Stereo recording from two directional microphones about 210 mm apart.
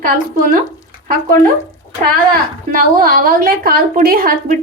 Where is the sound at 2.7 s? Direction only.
45° right (ahead or behind).